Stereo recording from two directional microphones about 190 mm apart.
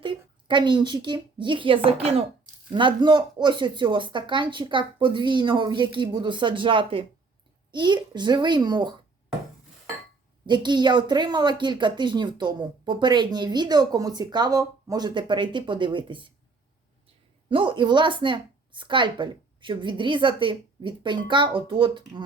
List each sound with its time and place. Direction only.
0.0 s a woman's voice: 25° right (ahead or behind)
10.4 s a woman's voice: 25° right (ahead or behind)
17.5 s a woman's voice: 25° right (ahead or behind)